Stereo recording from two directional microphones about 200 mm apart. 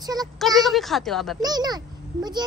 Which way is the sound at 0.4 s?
Centre (ahead or behind).